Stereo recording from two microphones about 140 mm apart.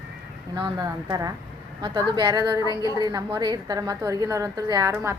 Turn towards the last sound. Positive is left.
turn(degrees=-20)  # may be behind; listen again after turning